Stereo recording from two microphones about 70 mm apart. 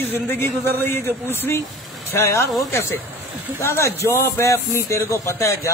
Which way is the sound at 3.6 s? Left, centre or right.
Left.